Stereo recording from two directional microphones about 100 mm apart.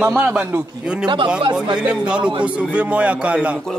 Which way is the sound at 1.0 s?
50° right (ahead or behind).